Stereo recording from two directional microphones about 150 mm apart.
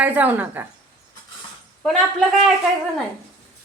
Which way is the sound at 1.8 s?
5° left (ahead or behind).